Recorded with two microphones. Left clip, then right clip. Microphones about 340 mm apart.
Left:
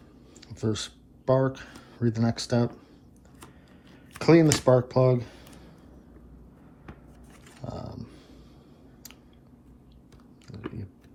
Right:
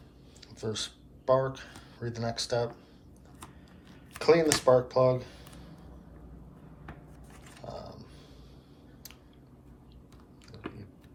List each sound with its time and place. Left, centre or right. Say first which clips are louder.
0.4 s speech: left 4 dB; centre
4.2 s speech: left 3 dB; centre
7.6 s mechanisms: left 3 dB; left